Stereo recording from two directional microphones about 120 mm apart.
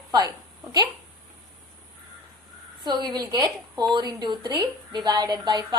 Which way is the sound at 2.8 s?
35° right (ahead or behind).